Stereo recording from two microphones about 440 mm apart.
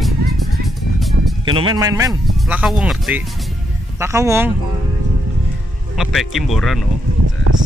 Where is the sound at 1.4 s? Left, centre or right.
Centre.